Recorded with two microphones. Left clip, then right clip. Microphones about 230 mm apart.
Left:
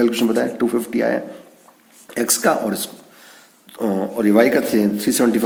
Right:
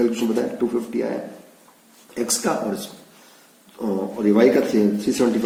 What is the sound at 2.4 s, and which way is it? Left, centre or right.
Speech, left.